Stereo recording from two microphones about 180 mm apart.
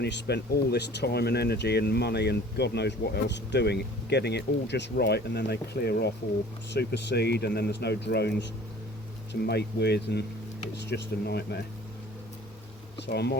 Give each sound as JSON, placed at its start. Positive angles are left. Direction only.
{"t": 0.0, "sound": "speech", "side_deg": 65}
{"t": 13.0, "sound": "speech", "side_deg": 65}